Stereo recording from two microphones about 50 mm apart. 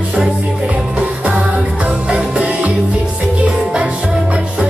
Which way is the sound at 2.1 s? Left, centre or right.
Right.